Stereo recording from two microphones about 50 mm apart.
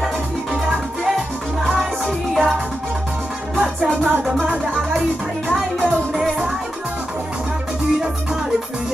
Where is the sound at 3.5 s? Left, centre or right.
Centre.